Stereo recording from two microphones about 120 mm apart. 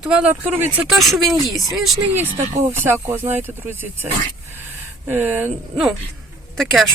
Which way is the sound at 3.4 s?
15° right (ahead or behind).